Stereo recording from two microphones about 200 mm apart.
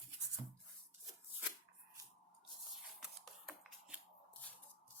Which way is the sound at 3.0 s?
Centre (ahead or behind).